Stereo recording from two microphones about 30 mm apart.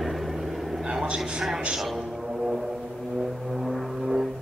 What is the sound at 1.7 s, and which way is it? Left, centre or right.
Speech, centre.